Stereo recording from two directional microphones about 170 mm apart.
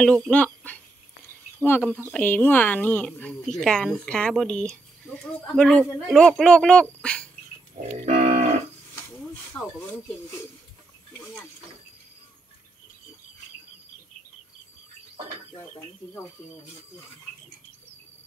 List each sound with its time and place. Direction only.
0.0 s speech: 10° left (ahead or behind)
8.0 s livestock: 40° right (ahead or behind)
9.6 s speech: 10° left (ahead or behind)